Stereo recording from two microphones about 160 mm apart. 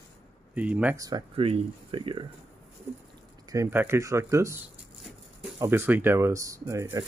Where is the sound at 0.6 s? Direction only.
10° right (ahead or behind).